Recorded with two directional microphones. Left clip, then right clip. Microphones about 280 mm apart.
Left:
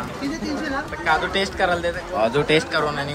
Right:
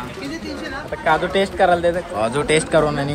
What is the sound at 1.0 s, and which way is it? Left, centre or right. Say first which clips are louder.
Speech: right 4 dB; centre.